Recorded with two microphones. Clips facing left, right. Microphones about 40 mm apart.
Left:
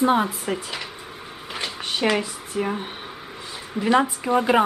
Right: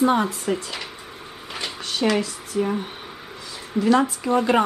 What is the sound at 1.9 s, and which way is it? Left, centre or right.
Speech, left.